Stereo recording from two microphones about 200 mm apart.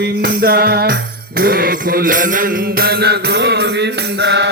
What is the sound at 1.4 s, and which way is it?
Mantra, 45° right (ahead or behind).